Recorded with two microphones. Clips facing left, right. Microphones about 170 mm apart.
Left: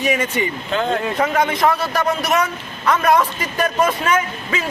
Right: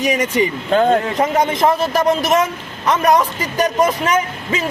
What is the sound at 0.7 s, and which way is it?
Speech, 45° right (ahead or behind).